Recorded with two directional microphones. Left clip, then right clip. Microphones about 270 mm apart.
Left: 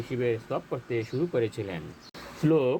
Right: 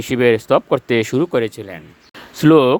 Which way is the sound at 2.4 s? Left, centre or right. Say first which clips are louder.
Right 13 dB; right.